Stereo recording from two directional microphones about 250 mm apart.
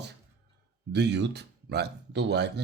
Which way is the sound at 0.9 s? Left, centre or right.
Right.